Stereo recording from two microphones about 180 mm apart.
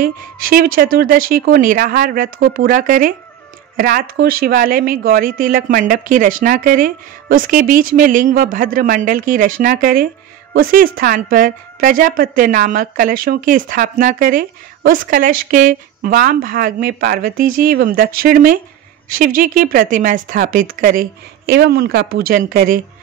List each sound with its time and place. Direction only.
0.0 s a woman's voice: 50° right (ahead or behind)